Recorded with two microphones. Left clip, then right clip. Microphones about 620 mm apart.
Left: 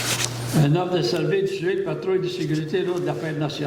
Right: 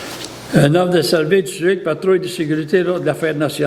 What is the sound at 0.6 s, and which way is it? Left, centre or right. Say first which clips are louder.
A man's voice: right 8 dB; right.